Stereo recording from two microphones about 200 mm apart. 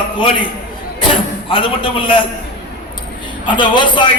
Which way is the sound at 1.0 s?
25° left (ahead or behind).